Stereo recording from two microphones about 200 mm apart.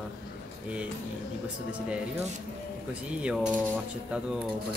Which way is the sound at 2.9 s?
5° right (ahead or behind).